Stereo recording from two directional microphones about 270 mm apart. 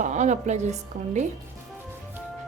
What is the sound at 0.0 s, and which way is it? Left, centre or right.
A woman's voice, right.